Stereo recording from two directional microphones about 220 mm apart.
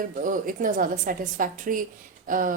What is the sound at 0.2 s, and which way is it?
Speech, 35° right (ahead or behind).